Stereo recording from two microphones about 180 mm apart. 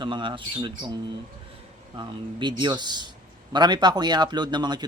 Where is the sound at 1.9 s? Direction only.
25° right (ahead or behind).